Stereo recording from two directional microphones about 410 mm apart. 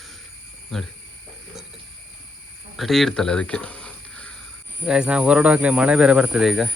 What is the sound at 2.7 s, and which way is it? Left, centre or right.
Speech, centre.